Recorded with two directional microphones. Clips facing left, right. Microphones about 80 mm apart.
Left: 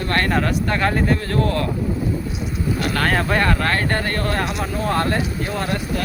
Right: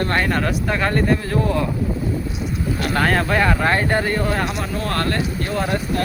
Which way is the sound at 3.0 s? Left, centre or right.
Centre.